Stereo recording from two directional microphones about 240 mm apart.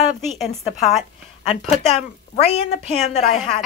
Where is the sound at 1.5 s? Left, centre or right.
Left.